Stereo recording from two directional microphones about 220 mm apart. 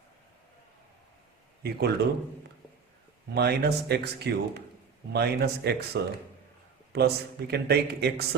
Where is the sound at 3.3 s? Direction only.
50° right (ahead or behind).